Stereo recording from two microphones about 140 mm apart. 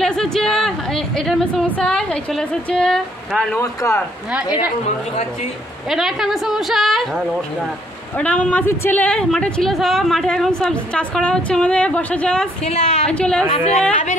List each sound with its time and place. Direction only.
0.0 s speech: 5° left (ahead or behind)
3.5 s speech: 20° left (ahead or behind)
5.9 s a woman's voice: 5° right (ahead or behind)
8.2 s a woman's voice: 10° left (ahead or behind)
12.6 s a woman's voice: 55° left (ahead or behind)
13.0 s a woman's voice: 5° left (ahead or behind)
13.5 s a woman's voice: 40° left (ahead or behind)